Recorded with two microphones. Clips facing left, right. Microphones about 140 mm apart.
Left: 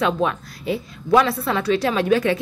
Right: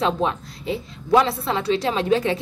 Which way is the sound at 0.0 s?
25° right (ahead or behind).